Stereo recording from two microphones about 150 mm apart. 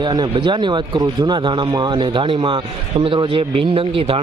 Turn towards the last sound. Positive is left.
turn(degrees=-35)  # may be behind; listen again after turning